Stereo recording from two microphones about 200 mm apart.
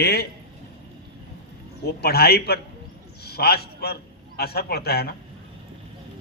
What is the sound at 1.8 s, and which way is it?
A man's voice, 55° left (ahead or behind).